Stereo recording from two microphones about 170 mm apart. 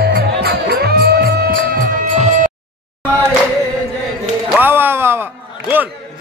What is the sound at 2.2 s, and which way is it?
Music, 45° right (ahead or behind).